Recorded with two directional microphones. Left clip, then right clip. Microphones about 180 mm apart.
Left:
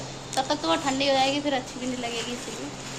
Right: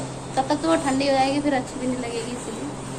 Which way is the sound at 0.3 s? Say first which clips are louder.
Right 4 dB; 20° left (ahead or behind).